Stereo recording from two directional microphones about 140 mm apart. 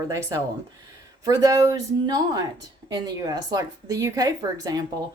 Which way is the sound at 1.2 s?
25° right (ahead or behind).